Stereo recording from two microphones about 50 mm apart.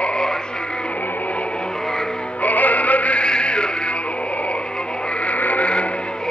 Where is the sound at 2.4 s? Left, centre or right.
Left.